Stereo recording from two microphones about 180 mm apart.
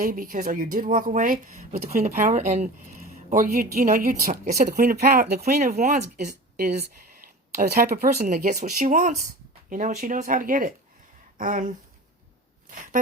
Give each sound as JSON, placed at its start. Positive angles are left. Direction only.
{"t": 0.0, "sound": "speech", "side_deg": -50}
{"t": 6.6, "sound": "speech", "side_deg": -60}
{"t": 8.4, "sound": "speech", "side_deg": -45}